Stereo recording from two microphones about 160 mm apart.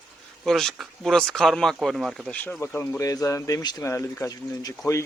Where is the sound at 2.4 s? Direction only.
10° left (ahead or behind).